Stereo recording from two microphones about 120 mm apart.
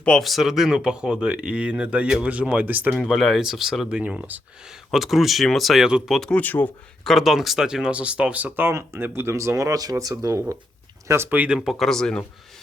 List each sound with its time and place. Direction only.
0.0 s speech: 5° left (ahead or behind); by 2.9 s 15° right (ahead or behind)
2.9 s speech: centre (ahead or behind); by 6.7 s 15° left (ahead or behind)
7.0 s speech: centre (ahead or behind)